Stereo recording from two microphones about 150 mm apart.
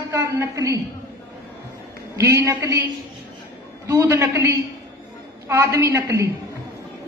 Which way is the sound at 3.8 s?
20° right (ahead or behind).